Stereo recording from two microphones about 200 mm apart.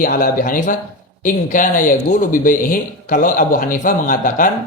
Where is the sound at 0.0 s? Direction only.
45° left (ahead or behind).